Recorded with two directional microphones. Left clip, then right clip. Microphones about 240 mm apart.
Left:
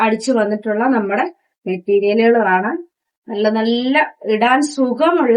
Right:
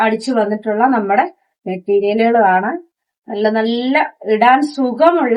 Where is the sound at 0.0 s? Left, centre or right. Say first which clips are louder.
Even; centre.